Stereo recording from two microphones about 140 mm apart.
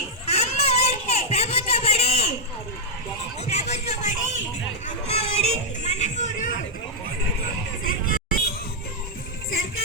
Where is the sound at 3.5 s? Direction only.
50° left (ahead or behind).